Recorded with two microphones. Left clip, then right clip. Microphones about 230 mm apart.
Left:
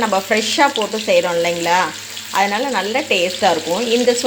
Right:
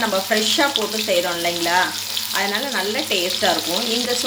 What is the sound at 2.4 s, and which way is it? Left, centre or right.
Frying, left.